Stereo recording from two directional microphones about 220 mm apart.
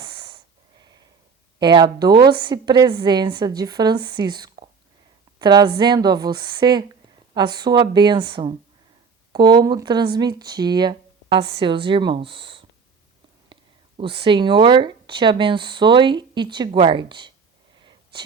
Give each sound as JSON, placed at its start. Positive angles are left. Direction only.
{"t": 0.0, "sound": "wheeze", "side_deg": -20}
{"t": 1.5, "sound": "speech", "side_deg": -20}
{"t": 14.0, "sound": "speech", "side_deg": -20}